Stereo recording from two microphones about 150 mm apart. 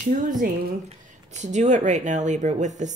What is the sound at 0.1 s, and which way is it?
Speech, 60° right (ahead or behind).